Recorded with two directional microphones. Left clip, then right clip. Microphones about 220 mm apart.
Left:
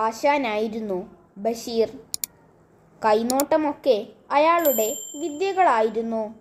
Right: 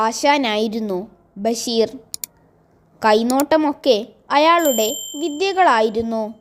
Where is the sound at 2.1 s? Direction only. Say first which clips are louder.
Even; centre (ahead or behind).